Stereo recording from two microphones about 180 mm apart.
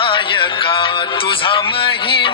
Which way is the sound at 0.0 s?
30° left (ahead or behind).